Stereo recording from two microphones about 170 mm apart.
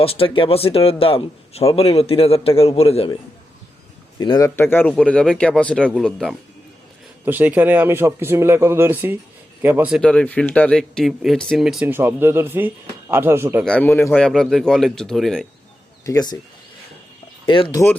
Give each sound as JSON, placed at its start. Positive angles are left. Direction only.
{"t": 0.0, "sound": "a man's voice", "side_deg": 35}
{"t": 4.2, "sound": "speech", "side_deg": 30}
{"t": 4.4, "sound": "speech", "side_deg": 10}
{"t": 7.3, "sound": "a man's voice", "side_deg": -10}
{"t": 10.0, "sound": "speech", "side_deg": 5}
{"t": 13.7, "sound": "a man's voice", "side_deg": 10}
{"t": 16.0, "sound": "speech", "side_deg": 20}
{"t": 17.4, "sound": "speech", "side_deg": 30}